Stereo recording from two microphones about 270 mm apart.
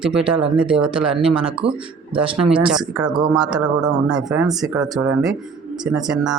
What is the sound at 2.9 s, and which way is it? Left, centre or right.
Speech, centre.